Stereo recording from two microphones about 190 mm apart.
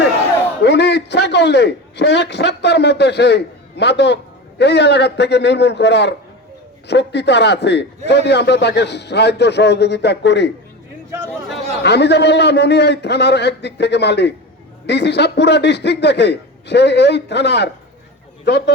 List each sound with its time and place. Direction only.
0.6 s a man's voice: 60° left (ahead or behind)
11.8 s a man's voice: 60° left (ahead or behind)